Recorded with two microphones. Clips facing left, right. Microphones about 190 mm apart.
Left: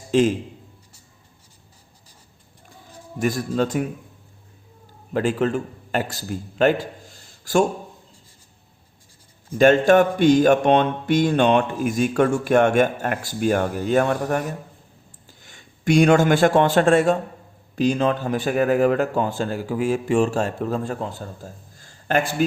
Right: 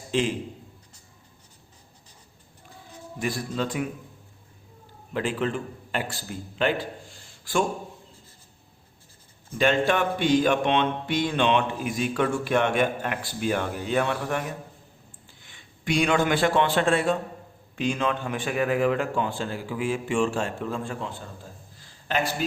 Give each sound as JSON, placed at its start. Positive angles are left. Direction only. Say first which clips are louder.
{"t": 0.1, "sound": "a man's voice", "louder": "left 8 dB", "side_deg": 45}
{"t": 3.2, "sound": "mantra", "louder": "left 7 dB", "side_deg": 45}
{"t": 5.1, "sound": "a man's voice", "louder": "left 6 dB", "side_deg": 45}
{"t": 9.6, "sound": "mantra", "louder": "left 8 dB", "side_deg": 45}
{"t": 15.3, "sound": "a man's voice", "louder": "left 4 dB", "side_deg": 45}